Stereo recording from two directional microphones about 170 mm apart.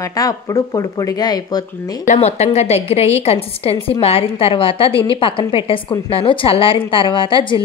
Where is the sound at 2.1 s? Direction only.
40° left (ahead or behind).